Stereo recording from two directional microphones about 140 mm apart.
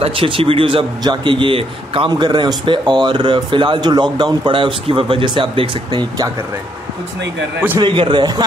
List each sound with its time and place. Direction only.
0.0 s a man's voice: 40° right (ahead or behind)
7.8 s a man's voice: 35° right (ahead or behind)